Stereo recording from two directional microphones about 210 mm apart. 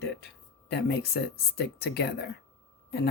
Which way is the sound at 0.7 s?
50° left (ahead or behind).